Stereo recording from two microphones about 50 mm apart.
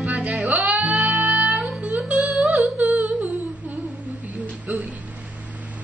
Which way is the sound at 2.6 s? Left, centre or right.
Right.